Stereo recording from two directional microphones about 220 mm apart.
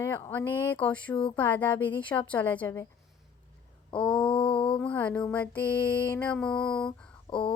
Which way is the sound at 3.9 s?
20° left (ahead or behind).